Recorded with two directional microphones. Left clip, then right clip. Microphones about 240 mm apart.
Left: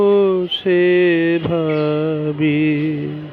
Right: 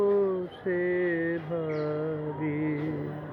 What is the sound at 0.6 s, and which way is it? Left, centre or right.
Mantra, left.